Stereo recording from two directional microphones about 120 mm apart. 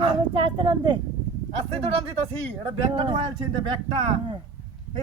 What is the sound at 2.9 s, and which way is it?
Speech, 45° right (ahead or behind).